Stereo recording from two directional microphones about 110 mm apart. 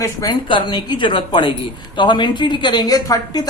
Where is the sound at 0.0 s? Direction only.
30° left (ahead or behind).